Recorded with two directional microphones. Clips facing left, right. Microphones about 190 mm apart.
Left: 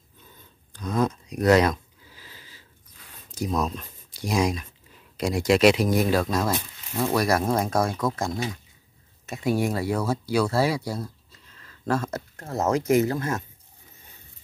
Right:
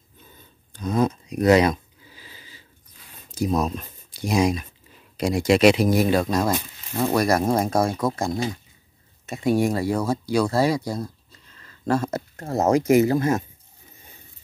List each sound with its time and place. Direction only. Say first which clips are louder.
0.9 s a sound: right 3 dB; 5° right (ahead or behind)
3.3 s speech: right 4 dB; 5° right (ahead or behind)
7.8 s speech: right 3 dB; 25° right (ahead or behind)
9.2 s speech: right 4 dB; centre (ahead or behind)
12.0 s speech: right 4 dB; 10° right (ahead or behind)